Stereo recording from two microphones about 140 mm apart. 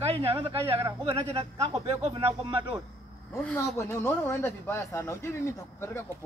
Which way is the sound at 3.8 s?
20° left (ahead or behind).